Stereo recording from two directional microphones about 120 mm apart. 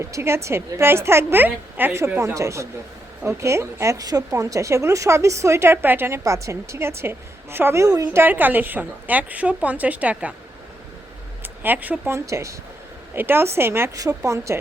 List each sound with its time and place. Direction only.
0.0 s speech: 20° right (ahead or behind)
8.0 s a woman's voice: 15° right (ahead or behind)
11.6 s speech: 15° right (ahead or behind)